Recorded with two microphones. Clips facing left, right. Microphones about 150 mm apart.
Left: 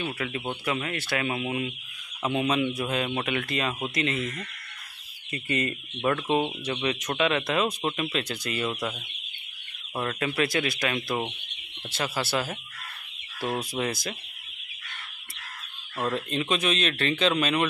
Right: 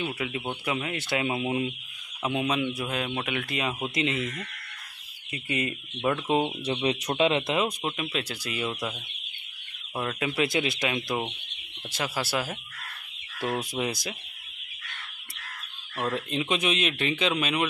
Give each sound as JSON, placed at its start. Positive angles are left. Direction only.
{"t": 0.0, "sound": "speech", "side_deg": -10}
{"t": 2.2, "sound": "speech", "side_deg": -5}
{"t": 5.3, "sound": "speech", "side_deg": -10}
{"t": 6.7, "sound": "speech", "side_deg": -25}
{"t": 7.8, "sound": "speech", "side_deg": -5}
{"t": 9.9, "sound": "speech", "side_deg": -5}
{"t": 13.6, "sound": "speech", "side_deg": -15}
{"t": 16.3, "sound": "speech", "side_deg": -15}